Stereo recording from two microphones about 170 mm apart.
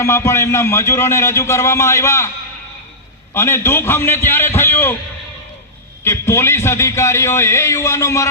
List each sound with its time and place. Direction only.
0.0 s a man's voice: 15° left (ahead or behind)
3.3 s a man's voice: 15° left (ahead or behind)
6.1 s a man's voice: 15° left (ahead or behind)